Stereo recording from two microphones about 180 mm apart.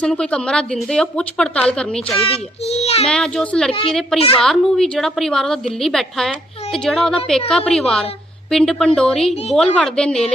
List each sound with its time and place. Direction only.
0.0 s a woman's voice: 5° left (ahead or behind)
2.2 s a child's voice: 35° left (ahead or behind)
3.1 s a woman's voice: 5° left (ahead or behind)
3.7 s a child's voice: 30° left (ahead or behind)
4.4 s a woman's voice: 5° left (ahead or behind)